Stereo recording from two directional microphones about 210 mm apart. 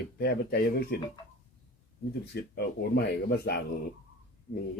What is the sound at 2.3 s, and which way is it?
Speech, 50° left (ahead or behind).